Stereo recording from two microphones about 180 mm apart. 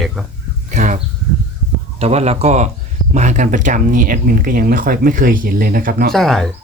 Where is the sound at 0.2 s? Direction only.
Centre (ahead or behind).